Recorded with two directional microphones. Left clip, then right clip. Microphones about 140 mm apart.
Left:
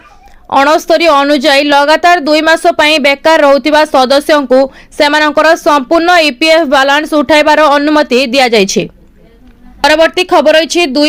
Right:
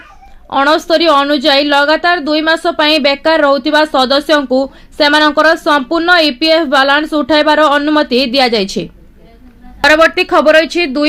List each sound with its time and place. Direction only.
0.5 s a woman's voice: 35° left (ahead or behind)